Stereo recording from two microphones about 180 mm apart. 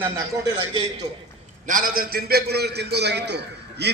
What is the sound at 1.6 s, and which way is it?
A man's voice, 50° right (ahead or behind).